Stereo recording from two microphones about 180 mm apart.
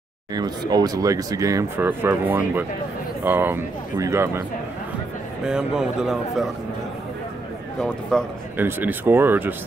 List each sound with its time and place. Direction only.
0.3 s speech: 20° right (ahead or behind)
5.4 s a man's voice: 5° right (ahead or behind)
7.8 s a man's voice: 5° left (ahead or behind)
8.5 s speech: 10° right (ahead or behind)